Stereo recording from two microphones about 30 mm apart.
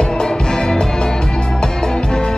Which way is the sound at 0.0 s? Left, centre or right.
Left.